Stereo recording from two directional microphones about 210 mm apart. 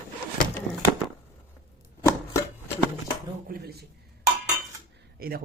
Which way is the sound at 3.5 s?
50° right (ahead or behind).